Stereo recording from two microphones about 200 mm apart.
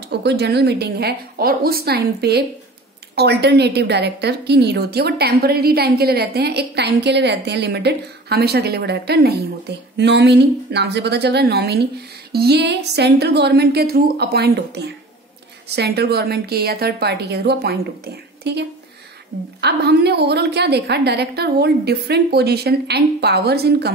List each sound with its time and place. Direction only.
0.1 s a woman's voice: 55° right (ahead or behind)